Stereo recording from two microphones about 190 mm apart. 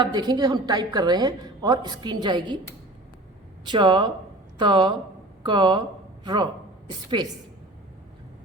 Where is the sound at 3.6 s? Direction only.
25° right (ahead or behind).